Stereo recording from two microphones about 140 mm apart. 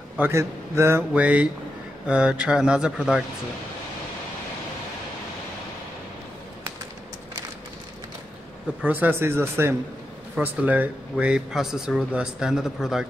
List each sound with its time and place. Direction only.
0.2 s speech: 20° right (ahead or behind)
8.8 s speech: 10° right (ahead or behind)